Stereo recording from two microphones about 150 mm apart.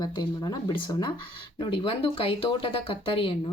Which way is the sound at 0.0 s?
30° left (ahead or behind).